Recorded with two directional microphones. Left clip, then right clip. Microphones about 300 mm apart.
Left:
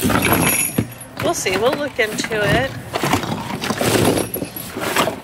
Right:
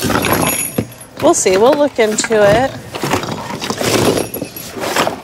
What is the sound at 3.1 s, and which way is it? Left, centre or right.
Clip-clop, centre.